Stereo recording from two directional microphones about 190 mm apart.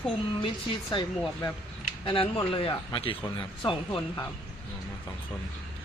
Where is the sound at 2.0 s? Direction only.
25° left (ahead or behind).